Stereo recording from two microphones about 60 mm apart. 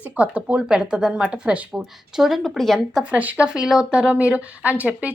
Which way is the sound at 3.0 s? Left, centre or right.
Right.